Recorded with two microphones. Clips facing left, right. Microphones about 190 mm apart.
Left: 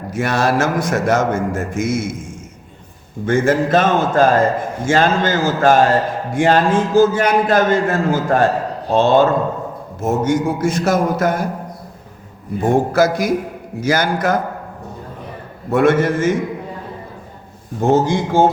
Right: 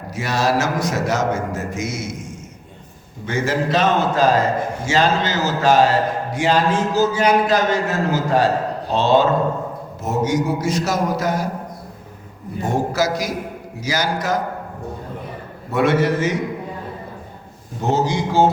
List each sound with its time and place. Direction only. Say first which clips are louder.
0.1 s a man's voice: left 3 dB; 55° left (ahead or behind)
3.2 s a man's voice: left 6 dB; 50° left (ahead or behind)
12.5 s a man's voice: left 6 dB; 55° left (ahead or behind)
15.7 s a man's voice: left 3 dB; 50° left (ahead or behind)
17.7 s a man's voice: left 5 dB; 50° left (ahead or behind)